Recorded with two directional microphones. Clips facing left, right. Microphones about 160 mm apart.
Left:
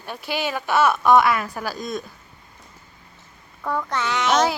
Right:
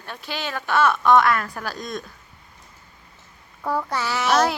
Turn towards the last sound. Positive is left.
turn(degrees=0)  # may be behind; listen again after turning